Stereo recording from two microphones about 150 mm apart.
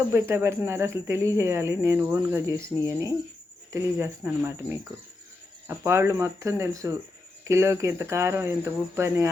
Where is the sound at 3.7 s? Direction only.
15° right (ahead or behind).